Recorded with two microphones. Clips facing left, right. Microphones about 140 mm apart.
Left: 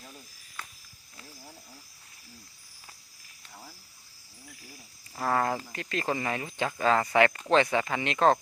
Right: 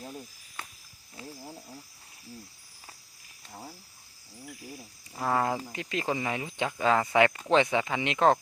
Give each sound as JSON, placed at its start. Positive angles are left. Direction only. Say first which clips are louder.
{"t": 1.2, "sound": "a sound", "louder": "right 7 dB", "side_deg": -25}
{"t": 3.5, "sound": "frog", "louder": "right 5 dB", "side_deg": -25}
{"t": 5.2, "sound": "speech", "louder": "even", "side_deg": -10}